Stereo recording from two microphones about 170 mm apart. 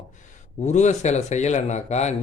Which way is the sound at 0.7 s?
45° left (ahead or behind).